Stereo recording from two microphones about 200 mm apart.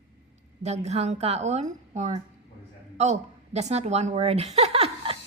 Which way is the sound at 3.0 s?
35° right (ahead or behind).